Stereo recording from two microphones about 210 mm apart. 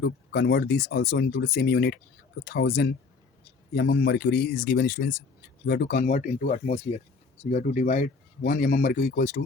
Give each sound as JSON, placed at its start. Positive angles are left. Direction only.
{"t": 0.0, "sound": "a man's voice", "side_deg": 55}